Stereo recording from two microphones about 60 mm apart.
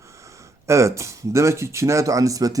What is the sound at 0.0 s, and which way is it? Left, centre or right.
Speech, right.